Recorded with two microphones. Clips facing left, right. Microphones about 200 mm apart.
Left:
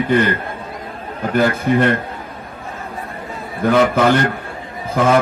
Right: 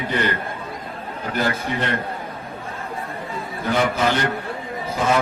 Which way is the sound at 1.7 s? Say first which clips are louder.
Left 11 dB; 50° left (ahead or behind).